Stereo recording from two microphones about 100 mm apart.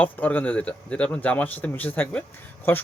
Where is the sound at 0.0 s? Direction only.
15° left (ahead or behind).